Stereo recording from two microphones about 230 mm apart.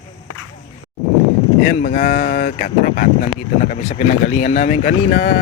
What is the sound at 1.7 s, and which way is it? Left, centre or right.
Speech, left.